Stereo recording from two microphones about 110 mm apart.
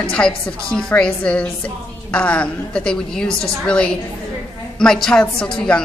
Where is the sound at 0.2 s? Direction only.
15° left (ahead or behind).